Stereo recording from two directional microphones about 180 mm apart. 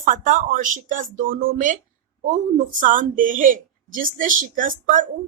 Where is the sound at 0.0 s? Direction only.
45° right (ahead or behind).